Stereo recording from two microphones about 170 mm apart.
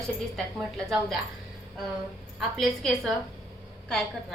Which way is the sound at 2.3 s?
Centre (ahead or behind).